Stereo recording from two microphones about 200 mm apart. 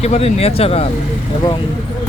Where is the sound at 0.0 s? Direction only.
30° left (ahead or behind).